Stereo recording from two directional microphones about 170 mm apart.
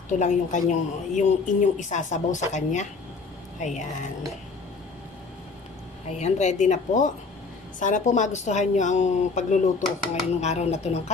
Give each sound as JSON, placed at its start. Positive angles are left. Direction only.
{"t": 0.2, "sound": "speech", "side_deg": 45}
{"t": 6.0, "sound": "speech", "side_deg": 40}